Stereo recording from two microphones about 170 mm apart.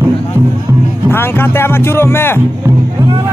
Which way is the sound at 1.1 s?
15° left (ahead or behind).